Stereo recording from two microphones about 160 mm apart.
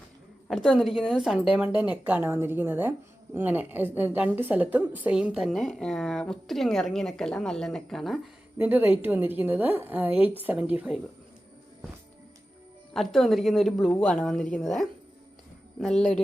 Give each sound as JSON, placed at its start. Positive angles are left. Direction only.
{"t": 0.4, "sound": "a woman's voice", "side_deg": 5}
{"t": 8.5, "sound": "a woman's voice", "side_deg": -10}
{"t": 12.9, "sound": "a woman's voice", "side_deg": 0}